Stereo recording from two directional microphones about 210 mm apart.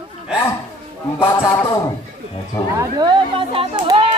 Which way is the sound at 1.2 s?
10° left (ahead or behind).